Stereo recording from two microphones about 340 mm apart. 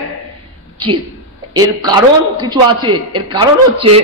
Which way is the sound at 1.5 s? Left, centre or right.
Centre.